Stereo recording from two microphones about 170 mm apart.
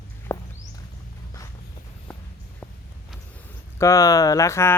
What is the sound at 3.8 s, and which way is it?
Speech, 20° left (ahead or behind).